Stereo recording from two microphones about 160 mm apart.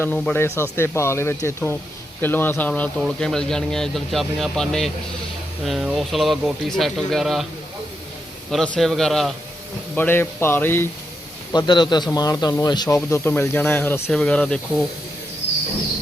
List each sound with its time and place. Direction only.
0.0 s speech: 10° left (ahead or behind)
8.4 s speech: 5° left (ahead or behind)
9.9 s speech: 10° left (ahead or behind)
11.5 s speech: 30° left (ahead or behind)
13.1 s speech: 15° left (ahead or behind)